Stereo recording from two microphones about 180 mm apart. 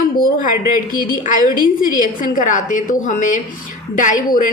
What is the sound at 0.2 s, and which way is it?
A woman's voice, 50° left (ahead or behind).